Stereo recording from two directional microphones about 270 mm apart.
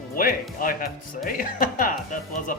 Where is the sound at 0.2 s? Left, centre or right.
Left.